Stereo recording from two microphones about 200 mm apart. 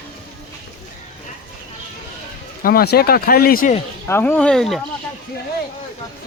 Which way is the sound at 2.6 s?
50° left (ahead or behind).